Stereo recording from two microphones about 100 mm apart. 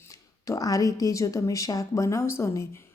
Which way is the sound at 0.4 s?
35° left (ahead or behind).